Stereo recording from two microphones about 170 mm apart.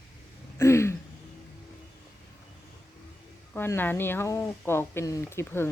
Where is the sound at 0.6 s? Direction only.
15° left (ahead or behind).